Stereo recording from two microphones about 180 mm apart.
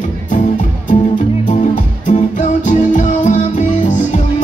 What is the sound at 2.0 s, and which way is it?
Music, 45° left (ahead or behind).